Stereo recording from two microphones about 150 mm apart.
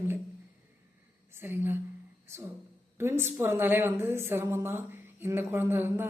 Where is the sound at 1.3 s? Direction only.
15° right (ahead or behind).